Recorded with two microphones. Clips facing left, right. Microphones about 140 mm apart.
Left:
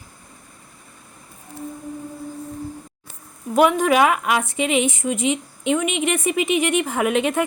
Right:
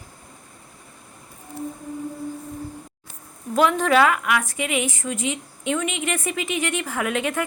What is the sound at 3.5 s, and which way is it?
A woman's voice, 15° left (ahead or behind).